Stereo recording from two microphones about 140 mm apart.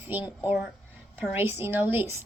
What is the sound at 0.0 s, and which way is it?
A woman's voice, 15° right (ahead or behind).